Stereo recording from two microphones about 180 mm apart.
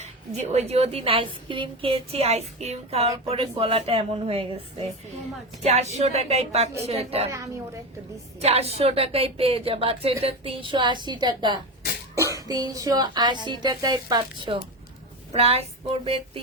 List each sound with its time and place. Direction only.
0.3 s a woman's voice: 35° right (ahead or behind)
7.3 s a woman's voice: 15° right (ahead or behind)
8.4 s a woman's voice: 35° right (ahead or behind)
15.3 s a woman's voice: 35° right (ahead or behind)